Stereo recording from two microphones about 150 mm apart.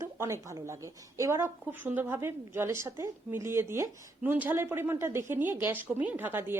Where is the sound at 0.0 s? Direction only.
20° right (ahead or behind).